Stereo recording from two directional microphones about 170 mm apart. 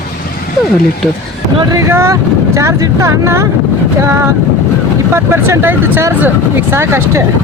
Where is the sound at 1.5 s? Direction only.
20° right (ahead or behind).